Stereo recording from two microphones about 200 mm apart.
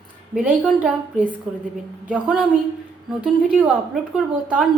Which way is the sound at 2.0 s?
5° right (ahead or behind).